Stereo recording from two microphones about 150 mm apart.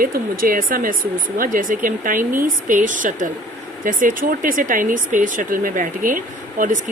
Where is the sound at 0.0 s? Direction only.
70° right (ahead or behind).